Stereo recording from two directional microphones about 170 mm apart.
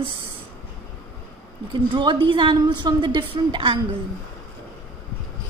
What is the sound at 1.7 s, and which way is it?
A woman's voice, 30° right (ahead or behind).